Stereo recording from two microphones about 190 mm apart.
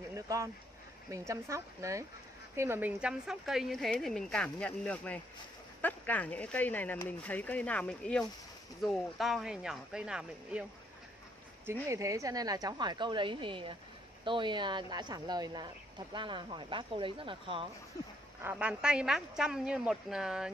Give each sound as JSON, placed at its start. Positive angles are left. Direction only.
{"t": 0.1, "sound": "a sound", "side_deg": -15}
{"t": 1.1, "sound": "a woman's voice", "side_deg": -15}
{"t": 11.9, "sound": "speech", "side_deg": -15}
{"t": 18.4, "sound": "a woman's voice", "side_deg": -10}